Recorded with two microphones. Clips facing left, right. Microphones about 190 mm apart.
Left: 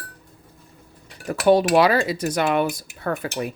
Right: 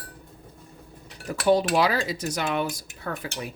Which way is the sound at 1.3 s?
60° left (ahead or behind).